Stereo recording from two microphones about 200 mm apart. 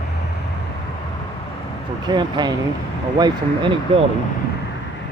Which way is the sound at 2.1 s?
20° right (ahead or behind).